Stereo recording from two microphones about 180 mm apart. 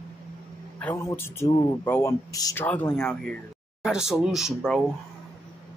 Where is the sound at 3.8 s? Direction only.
5° right (ahead or behind).